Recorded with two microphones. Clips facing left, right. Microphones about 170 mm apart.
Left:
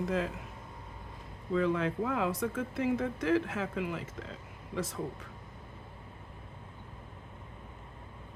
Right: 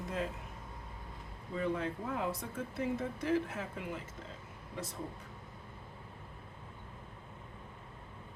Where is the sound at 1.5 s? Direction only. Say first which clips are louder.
Left 6 dB; 90° left.